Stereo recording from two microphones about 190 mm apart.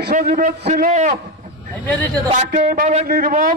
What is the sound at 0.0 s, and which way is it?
Speech, 50° right (ahead or behind).